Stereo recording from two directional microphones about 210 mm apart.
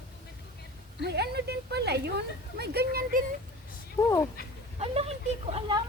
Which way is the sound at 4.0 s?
15° left (ahead or behind).